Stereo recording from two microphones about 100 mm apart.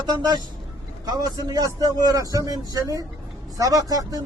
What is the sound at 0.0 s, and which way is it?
Speech, 45° right (ahead or behind).